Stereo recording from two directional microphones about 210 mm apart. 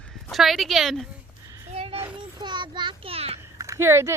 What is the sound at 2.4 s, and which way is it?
Speech, 20° right (ahead or behind).